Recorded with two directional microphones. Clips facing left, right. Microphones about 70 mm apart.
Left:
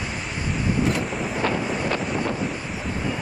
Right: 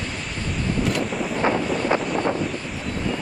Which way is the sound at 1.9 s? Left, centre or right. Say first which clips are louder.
Right 3 dB; centre.